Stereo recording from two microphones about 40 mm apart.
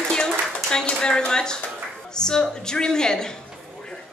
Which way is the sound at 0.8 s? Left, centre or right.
Left.